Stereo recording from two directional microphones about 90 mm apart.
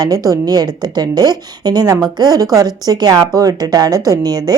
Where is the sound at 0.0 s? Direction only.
40° right (ahead or behind).